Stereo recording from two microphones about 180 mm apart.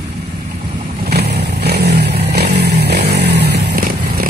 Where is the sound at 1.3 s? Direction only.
65° right (ahead or behind).